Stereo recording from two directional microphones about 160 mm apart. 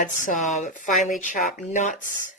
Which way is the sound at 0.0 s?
55° left (ahead or behind).